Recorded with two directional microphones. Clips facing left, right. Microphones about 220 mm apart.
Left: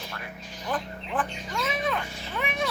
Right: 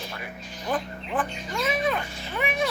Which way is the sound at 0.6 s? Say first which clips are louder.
Right 3 dB; 10° right (ahead or behind).